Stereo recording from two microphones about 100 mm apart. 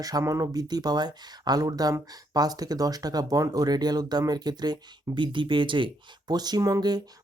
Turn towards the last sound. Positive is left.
turn(degrees=-40)  # may be behind; listen again after turning